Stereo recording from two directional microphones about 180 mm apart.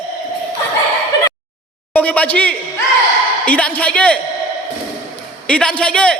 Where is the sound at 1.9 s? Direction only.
10° left (ahead or behind).